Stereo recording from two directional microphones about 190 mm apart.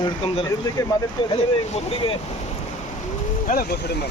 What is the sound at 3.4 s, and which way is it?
Speech, 50° left (ahead or behind).